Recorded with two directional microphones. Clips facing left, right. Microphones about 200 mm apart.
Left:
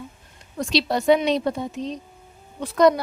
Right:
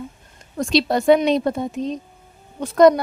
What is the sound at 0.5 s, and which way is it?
Speech, 50° right (ahead or behind).